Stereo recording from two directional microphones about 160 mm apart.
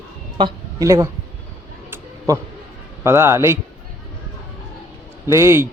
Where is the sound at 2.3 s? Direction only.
20° right (ahead or behind).